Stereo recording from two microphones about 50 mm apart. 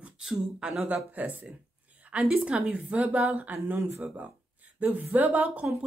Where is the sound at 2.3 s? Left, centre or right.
Centre.